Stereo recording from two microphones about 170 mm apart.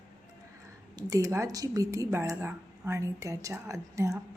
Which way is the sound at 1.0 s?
20° right (ahead or behind).